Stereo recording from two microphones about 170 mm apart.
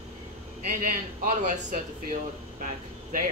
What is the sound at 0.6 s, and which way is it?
Speech, 50° right (ahead or behind).